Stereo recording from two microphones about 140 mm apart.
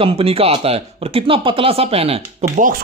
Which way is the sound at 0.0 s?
45° right (ahead or behind).